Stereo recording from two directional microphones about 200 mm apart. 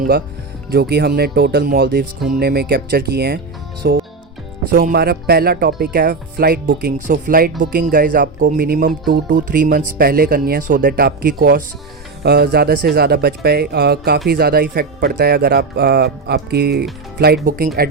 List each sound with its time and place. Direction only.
0.7 s speech: 55° right (ahead or behind)